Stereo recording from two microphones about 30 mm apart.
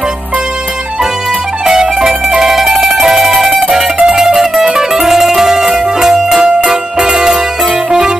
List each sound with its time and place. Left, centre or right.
1.7 s music: right